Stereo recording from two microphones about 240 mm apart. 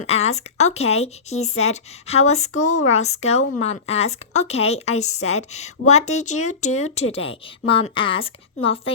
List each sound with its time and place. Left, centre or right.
0.0 s speech: left